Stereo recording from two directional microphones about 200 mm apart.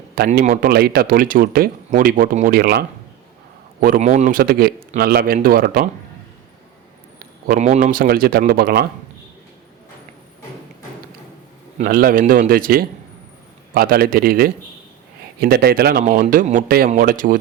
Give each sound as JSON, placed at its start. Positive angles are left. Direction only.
{"t": 0.3, "sound": "speech", "side_deg": -45}
{"t": 7.4, "sound": "speech", "side_deg": -40}
{"t": 11.9, "sound": "speech", "side_deg": -45}